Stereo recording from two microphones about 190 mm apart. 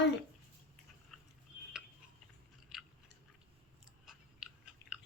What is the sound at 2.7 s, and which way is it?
Chewing, centre (ahead or behind).